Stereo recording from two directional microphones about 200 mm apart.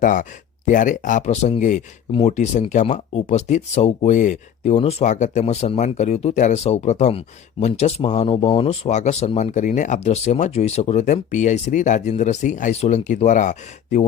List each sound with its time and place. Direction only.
0.0 s speech: 40° left (ahead or behind)